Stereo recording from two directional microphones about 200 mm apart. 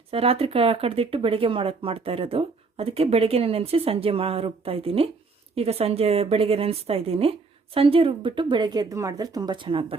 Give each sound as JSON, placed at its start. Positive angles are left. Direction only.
{"t": 0.1, "sound": "speech", "side_deg": -30}